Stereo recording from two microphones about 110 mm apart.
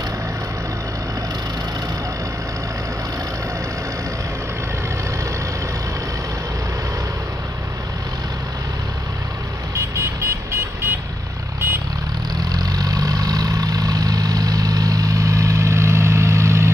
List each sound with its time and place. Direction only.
9.8 s vehicle: 25° right (ahead or behind)
12.5 s vehicle: 35° right (ahead or behind)